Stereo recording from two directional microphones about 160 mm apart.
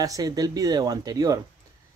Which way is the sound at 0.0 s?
25° right (ahead or behind).